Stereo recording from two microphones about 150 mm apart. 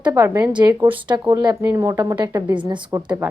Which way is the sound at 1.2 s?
30° right (ahead or behind).